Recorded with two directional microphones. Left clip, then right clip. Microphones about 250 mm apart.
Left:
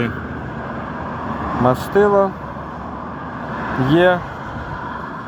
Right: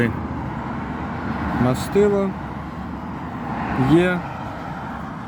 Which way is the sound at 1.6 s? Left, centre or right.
Centre.